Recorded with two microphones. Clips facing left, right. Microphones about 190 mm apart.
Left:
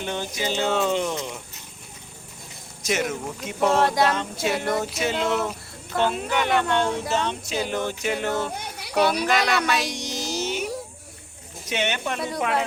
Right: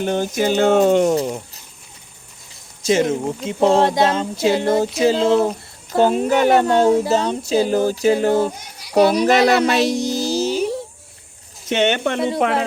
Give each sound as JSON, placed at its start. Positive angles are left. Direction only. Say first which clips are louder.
{"t": 0.0, "sound": "speech", "louder": "right 9 dB", "side_deg": -45}
{"t": 1.1, "sound": "speech", "louder": "right 11 dB", "side_deg": -35}
{"t": 2.8, "sound": "speech", "louder": "right 9 dB", "side_deg": -25}
{"t": 10.2, "sound": "a sound", "louder": "right 4 dB", "side_deg": -35}
{"t": 11.7, "sound": "speech", "louder": "right 8 dB", "side_deg": -55}